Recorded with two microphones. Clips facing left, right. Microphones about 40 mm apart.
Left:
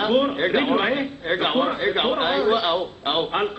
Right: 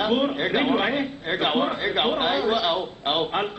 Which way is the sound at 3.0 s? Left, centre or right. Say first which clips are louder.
Left 1 dB; centre.